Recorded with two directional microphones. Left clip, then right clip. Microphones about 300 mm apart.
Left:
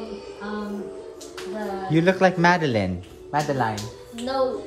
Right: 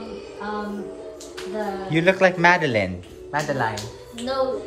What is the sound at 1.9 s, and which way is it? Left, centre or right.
A man's voice, centre.